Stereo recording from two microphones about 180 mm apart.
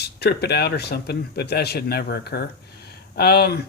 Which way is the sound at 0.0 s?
65° left (ahead or behind).